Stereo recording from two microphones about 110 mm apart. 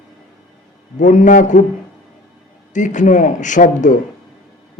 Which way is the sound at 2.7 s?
90° left.